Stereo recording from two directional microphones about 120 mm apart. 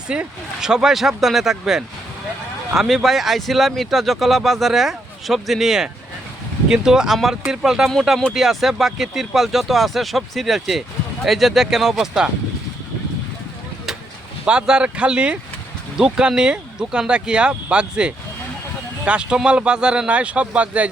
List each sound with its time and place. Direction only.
0.1 s speech: 5° right (ahead or behind)
14.4 s speech: 10° right (ahead or behind)